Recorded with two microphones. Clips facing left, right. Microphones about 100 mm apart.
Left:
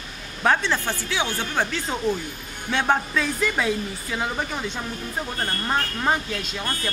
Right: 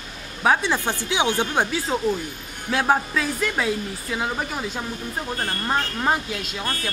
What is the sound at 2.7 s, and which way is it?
Speech, 5° right (ahead or behind).